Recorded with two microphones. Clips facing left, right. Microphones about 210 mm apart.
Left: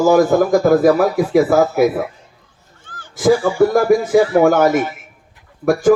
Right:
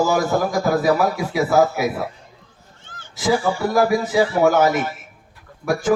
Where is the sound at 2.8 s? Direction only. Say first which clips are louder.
Left 4 dB; 25° right (ahead or behind).